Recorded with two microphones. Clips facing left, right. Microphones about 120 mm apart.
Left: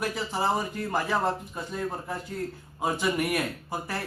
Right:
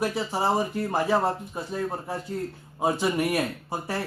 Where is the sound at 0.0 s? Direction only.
25° right (ahead or behind).